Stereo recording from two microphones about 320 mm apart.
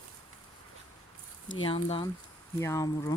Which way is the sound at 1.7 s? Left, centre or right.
Centre.